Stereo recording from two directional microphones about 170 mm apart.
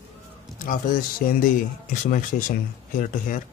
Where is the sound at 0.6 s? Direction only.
55° left (ahead or behind).